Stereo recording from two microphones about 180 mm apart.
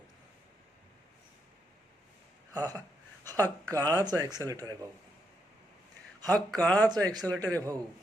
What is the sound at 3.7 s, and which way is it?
Speech, 20° right (ahead or behind).